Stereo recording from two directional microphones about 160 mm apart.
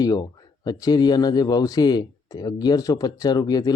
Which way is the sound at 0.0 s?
25° left (ahead or behind).